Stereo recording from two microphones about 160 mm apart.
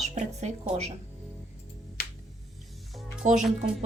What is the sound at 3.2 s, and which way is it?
Speech, 45° right (ahead or behind).